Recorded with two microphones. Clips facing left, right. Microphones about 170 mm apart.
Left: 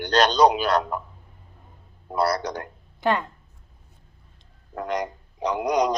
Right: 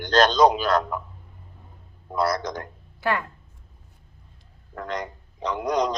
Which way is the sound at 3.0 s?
20° left (ahead or behind).